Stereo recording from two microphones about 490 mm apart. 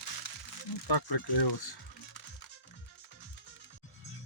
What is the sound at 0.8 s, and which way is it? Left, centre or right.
Speech, left.